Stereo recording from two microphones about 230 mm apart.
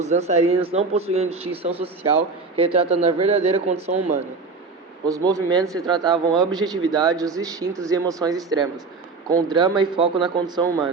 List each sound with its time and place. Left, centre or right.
0.0 s speech: right
5.0 s speech: centre